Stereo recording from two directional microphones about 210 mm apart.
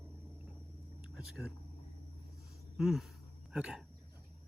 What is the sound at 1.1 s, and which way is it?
Speech, centre (ahead or behind).